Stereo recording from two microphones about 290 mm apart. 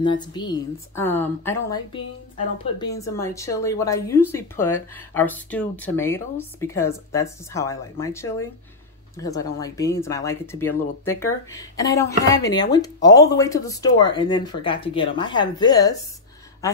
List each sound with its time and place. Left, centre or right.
0.0 s a woman's voice: centre